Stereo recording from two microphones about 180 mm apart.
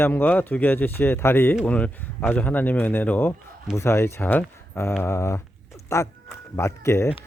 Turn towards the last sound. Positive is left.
turn(degrees=15)  # may be behind; listen again after turning